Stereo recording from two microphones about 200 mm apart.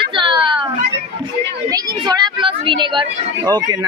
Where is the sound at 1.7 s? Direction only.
25° right (ahead or behind).